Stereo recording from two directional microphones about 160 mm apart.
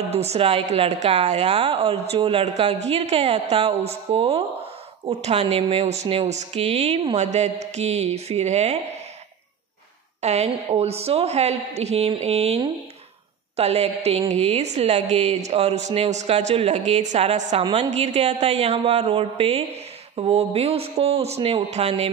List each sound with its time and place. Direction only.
0.1 s a woman's voice: 40° right (ahead or behind)
10.2 s a woman's voice: 45° right (ahead or behind)
13.6 s a woman's voice: 40° right (ahead or behind)